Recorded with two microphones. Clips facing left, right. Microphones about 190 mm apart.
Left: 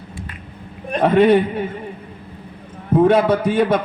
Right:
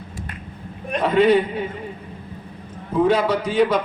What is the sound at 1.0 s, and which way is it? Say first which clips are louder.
Speech: left 3 dB; 55° left (ahead or behind).